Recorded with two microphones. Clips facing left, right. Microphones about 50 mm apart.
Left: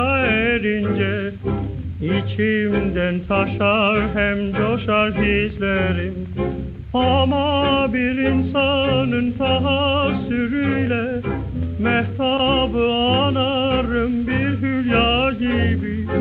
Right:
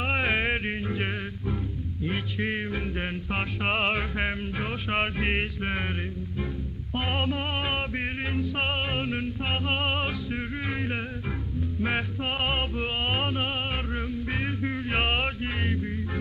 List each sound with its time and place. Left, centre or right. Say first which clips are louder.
0.0 s music: left 8 dB; left
7.0 s music: left 12 dB; left